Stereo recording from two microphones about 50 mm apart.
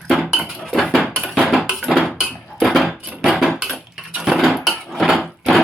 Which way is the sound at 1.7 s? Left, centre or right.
Centre.